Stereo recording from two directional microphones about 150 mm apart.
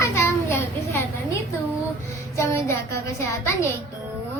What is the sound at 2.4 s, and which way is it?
A child's voice, 20° left (ahead or behind).